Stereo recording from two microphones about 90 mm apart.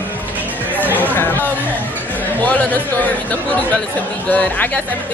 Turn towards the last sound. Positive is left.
turn(degrees=20)  # may be behind; listen again after turning